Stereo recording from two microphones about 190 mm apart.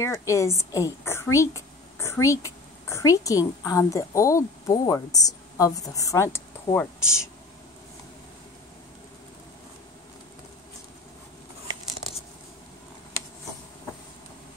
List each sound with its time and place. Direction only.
0.0 s a woman's voice: 15° left (ahead or behind)